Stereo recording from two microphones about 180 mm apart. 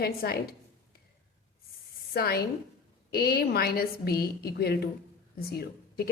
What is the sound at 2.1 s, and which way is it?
A woman's voice, 60° left (ahead or behind).